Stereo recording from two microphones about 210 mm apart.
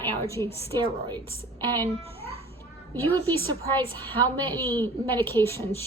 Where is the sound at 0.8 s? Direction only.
20° right (ahead or behind).